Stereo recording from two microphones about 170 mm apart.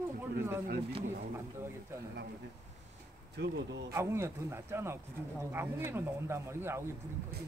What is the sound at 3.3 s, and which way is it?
Speech, 70° right (ahead or behind).